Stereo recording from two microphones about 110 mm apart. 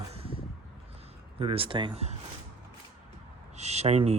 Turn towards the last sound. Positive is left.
turn(degrees=-75)  # may be behind; listen again after turning